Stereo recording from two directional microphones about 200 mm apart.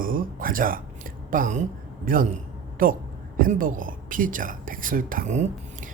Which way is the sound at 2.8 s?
45° right (ahead or behind).